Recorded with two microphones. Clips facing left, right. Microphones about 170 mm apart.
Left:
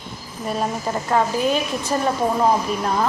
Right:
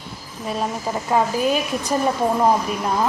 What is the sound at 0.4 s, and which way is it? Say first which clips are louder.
A woman's voice: left 1 dB; centre (ahead or behind).